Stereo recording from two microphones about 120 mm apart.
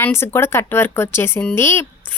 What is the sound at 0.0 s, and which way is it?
Speech, 20° left (ahead or behind).